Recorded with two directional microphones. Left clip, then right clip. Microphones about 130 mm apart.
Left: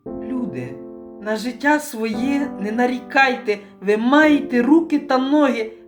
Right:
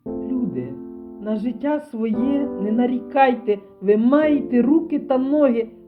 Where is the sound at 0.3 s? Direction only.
50° right (ahead or behind).